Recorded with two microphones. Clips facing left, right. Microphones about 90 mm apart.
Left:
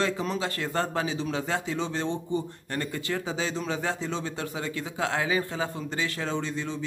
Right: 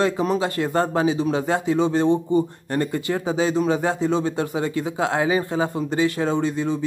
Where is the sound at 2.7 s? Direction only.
25° right (ahead or behind).